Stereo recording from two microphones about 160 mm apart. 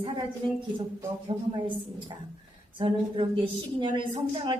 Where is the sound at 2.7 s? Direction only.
30° right (ahead or behind).